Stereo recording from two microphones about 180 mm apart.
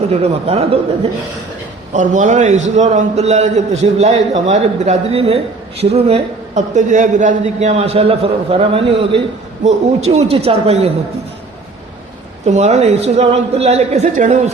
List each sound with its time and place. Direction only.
0.1 s a man's voice: 35° right (ahead or behind)
1.9 s a man's voice: 45° right (ahead or behind)
12.5 s a man's voice: 40° right (ahead or behind)